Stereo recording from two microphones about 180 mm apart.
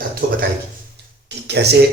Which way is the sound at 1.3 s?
70° right (ahead or behind).